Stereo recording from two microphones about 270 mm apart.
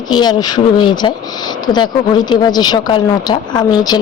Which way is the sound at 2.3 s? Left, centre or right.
Centre.